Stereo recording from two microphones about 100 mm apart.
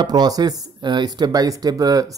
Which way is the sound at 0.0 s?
45° right (ahead or behind).